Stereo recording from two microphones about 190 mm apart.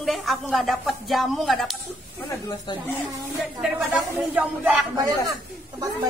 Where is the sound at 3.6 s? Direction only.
Centre (ahead or behind).